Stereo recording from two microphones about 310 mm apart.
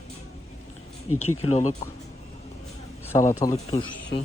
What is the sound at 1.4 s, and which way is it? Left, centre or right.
Speech, left.